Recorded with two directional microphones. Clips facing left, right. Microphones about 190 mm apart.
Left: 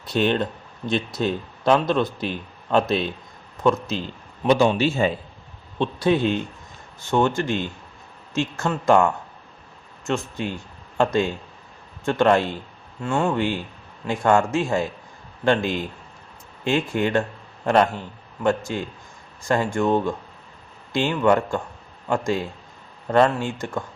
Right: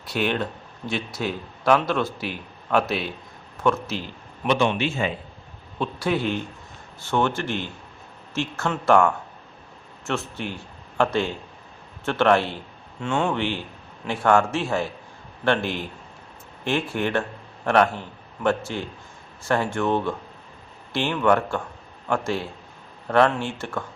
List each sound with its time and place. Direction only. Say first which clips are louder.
0.0 s a man's voice: left 4 dB; 20° left (ahead or behind)
4.4 s a man's voice: left 4 dB; 35° left (ahead or behind)
5.8 s a man's voice: left 4 dB; 20° left (ahead or behind)
18.4 s a man's voice: left 1 dB; 15° left (ahead or behind)